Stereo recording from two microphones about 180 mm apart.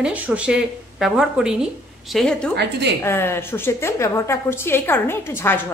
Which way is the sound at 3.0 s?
15° left (ahead or behind).